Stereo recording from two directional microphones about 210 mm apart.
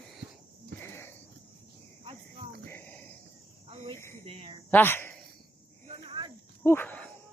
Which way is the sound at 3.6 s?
25° right (ahead or behind).